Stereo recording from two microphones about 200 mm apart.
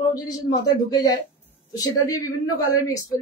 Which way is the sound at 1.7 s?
15° left (ahead or behind).